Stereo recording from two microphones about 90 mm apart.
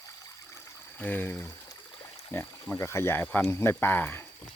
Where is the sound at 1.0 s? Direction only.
20° left (ahead or behind).